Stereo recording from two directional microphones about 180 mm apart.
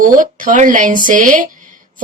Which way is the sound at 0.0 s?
50° right (ahead or behind).